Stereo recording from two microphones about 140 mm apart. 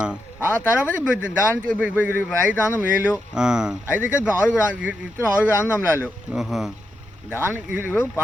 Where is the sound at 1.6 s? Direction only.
10° right (ahead or behind).